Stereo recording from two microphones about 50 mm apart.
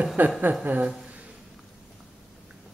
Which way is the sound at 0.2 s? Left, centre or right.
Right.